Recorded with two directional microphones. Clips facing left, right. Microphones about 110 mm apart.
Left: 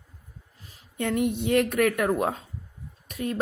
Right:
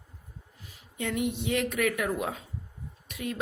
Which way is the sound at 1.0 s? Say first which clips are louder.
Left 5 dB; 50° left (ahead or behind).